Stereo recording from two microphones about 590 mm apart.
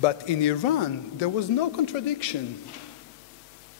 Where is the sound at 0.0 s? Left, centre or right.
Left.